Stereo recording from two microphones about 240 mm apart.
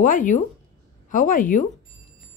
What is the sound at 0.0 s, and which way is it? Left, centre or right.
Speech, left.